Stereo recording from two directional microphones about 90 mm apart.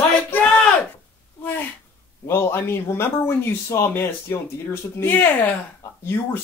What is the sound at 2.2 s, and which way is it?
Speech, 25° left (ahead or behind).